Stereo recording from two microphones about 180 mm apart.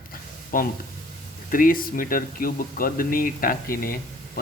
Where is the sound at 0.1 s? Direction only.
50° left (ahead or behind).